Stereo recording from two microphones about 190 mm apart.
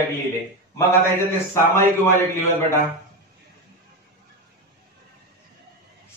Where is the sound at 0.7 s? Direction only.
15° left (ahead or behind).